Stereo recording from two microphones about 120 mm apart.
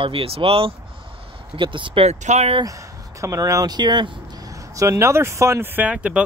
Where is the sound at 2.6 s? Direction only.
25° right (ahead or behind).